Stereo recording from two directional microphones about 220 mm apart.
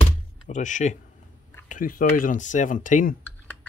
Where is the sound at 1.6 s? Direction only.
40° left (ahead or behind).